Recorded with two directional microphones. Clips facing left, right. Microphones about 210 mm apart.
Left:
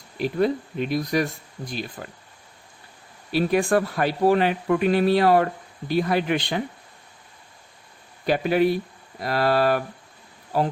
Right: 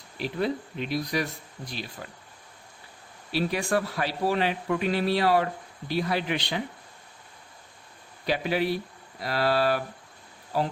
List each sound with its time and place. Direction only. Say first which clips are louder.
0.2 s speech: left 6 dB; 50° left (ahead or behind)
3.3 s speech: left 6 dB; 50° left (ahead or behind)
8.3 s speech: left 6 dB; 50° left (ahead or behind)